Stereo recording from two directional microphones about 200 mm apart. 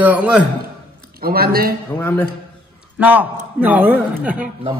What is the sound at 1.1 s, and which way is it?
Speech, 50° right (ahead or behind).